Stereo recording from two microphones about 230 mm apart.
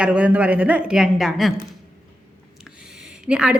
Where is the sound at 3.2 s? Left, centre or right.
Centre.